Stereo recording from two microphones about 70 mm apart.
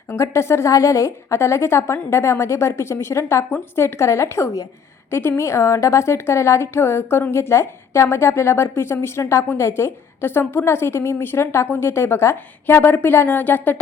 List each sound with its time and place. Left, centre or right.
0.1 s a woman's voice: left